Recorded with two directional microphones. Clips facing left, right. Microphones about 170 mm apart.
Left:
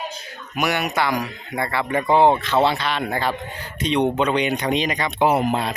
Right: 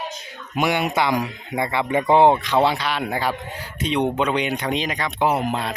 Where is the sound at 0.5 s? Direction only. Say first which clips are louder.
Right 1 dB; 25° right (ahead or behind).